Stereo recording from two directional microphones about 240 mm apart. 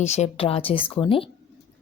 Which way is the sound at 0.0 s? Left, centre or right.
Left.